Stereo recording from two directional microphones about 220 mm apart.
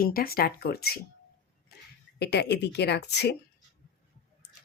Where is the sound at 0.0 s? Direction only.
40° left (ahead or behind).